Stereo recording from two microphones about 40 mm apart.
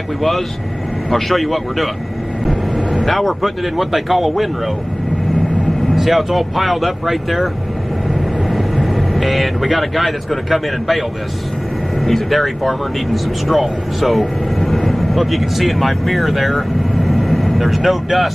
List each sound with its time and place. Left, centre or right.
1.1 s speech: centre
3.1 s speech: centre
5.9 s speech: centre
8.5 s speech: centre